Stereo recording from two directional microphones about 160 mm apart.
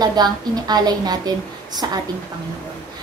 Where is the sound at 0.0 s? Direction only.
25° right (ahead or behind).